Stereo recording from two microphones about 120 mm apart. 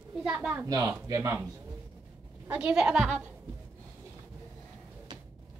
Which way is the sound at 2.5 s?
10° right (ahead or behind).